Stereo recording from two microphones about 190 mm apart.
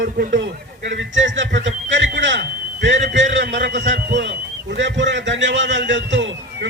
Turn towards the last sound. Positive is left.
turn(degrees=-70)  # may be behind; listen again after turning